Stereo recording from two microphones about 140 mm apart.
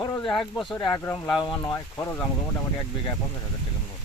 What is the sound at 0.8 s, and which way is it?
Speech, 30° left (ahead or behind).